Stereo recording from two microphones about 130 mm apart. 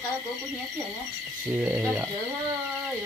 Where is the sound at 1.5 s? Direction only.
15° right (ahead or behind).